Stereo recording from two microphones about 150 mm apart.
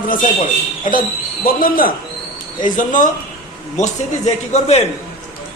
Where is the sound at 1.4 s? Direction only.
70° left (ahead or behind).